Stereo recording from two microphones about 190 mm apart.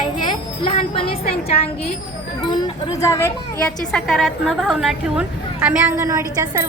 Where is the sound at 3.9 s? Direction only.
Centre (ahead or behind).